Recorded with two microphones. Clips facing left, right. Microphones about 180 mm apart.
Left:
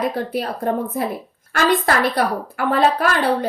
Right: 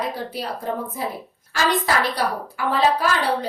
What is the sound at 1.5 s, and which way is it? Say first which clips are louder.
A woman's voice: left 4 dB; 55° left (ahead or behind).